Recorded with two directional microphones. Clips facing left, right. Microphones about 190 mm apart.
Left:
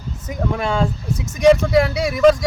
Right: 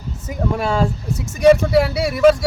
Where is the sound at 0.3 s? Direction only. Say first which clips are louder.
Right 1 dB; 5° right (ahead or behind).